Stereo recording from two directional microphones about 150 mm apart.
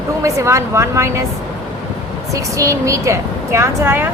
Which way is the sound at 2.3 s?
20° right (ahead or behind).